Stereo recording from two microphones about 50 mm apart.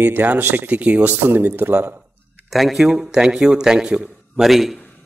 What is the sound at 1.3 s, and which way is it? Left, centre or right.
Speech, right.